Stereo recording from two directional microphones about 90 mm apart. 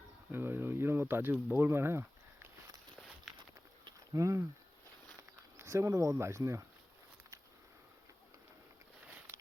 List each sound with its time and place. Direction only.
0.3 s speech: 25° right (ahead or behind)
3.3 s walk: centre (ahead or behind)
4.1 s speech: 35° right (ahead or behind)
5.5 s speech: 35° right (ahead or behind)